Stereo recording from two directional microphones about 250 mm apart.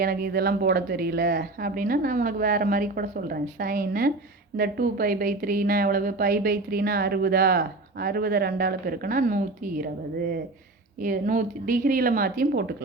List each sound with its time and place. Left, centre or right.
0.0 s a woman's voice: right